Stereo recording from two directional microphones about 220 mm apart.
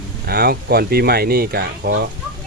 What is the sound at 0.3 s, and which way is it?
Speech, 45° right (ahead or behind).